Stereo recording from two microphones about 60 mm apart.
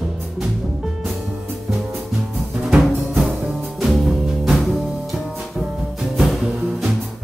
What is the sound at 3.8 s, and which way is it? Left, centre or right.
Music, centre.